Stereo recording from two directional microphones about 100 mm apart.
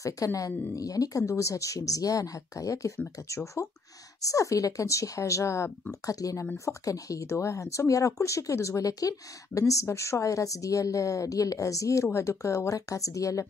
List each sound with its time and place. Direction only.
0.0 s speech: 35° left (ahead or behind)